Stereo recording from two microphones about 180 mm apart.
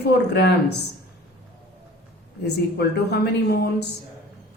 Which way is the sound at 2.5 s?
65° left (ahead or behind).